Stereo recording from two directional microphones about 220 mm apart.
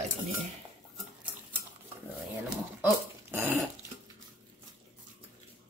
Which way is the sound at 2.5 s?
5° right (ahead or behind).